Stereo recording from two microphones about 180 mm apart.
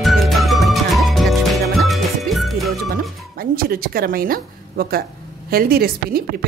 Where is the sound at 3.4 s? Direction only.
55° right (ahead or behind).